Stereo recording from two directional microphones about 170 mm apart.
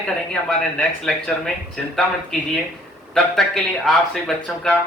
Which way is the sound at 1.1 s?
5° left (ahead or behind).